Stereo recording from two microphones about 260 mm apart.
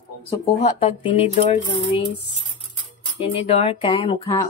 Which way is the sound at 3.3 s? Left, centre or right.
Left.